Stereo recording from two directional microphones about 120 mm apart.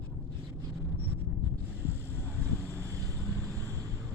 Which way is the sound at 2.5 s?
25° left (ahead or behind).